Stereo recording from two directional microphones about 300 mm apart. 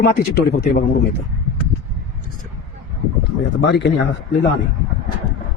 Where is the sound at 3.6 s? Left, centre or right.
Left.